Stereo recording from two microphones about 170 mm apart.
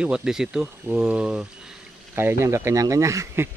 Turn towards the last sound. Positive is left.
turn(degrees=-15)  # may be behind; listen again after turning